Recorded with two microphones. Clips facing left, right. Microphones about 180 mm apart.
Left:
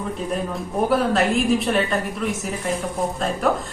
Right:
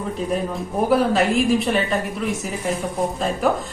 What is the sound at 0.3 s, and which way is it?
A woman's voice, centre (ahead or behind).